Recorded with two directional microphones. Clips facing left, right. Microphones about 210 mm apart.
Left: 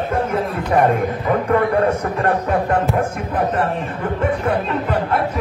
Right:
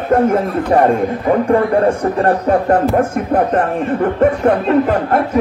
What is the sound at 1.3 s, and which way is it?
Speech, 30° right (ahead or behind).